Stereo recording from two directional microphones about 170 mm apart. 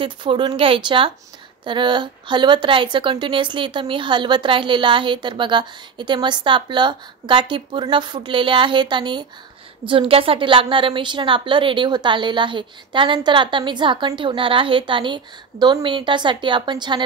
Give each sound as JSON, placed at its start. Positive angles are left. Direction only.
{"t": 0.0, "sound": "a woman's voice", "side_deg": -30}